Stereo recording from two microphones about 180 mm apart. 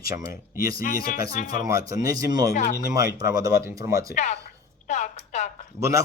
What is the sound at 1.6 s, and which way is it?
Speech, 20° right (ahead or behind).